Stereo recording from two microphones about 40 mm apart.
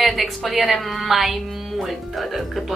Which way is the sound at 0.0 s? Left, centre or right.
Centre.